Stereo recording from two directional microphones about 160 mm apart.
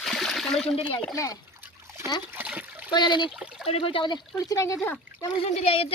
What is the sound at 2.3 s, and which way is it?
Trickle, 10° right (ahead or behind).